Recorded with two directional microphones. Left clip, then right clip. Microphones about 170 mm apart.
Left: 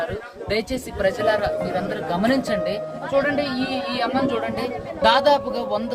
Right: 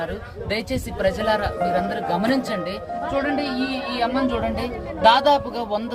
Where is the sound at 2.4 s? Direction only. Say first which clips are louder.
Left 3 dB; 15° left (ahead or behind).